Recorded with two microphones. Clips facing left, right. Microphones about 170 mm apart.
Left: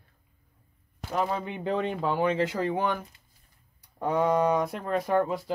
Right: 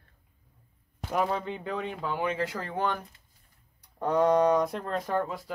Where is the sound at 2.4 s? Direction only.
20° left (ahead or behind).